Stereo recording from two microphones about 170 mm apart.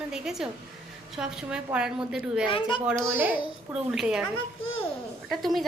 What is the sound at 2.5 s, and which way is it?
Speech, 30° left (ahead or behind).